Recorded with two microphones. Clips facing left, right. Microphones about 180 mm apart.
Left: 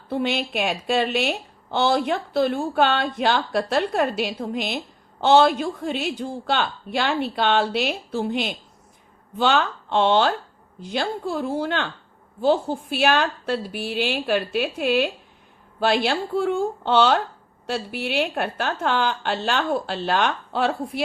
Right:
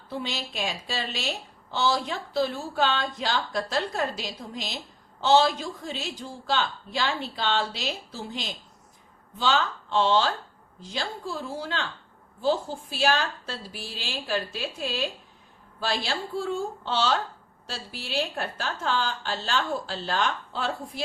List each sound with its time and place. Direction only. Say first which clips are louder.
0.1 s a woman's voice: left 9 dB; 60° left (ahead or behind)